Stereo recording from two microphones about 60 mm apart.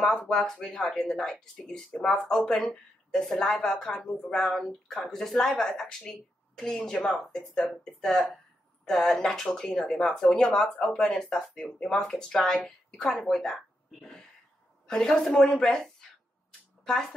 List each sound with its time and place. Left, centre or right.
0.0 s speech: centre
14.9 s speech: centre